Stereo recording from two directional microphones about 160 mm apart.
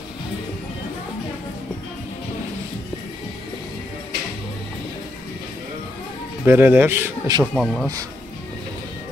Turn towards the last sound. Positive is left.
turn(degrees=0)  # may be behind; listen again after turning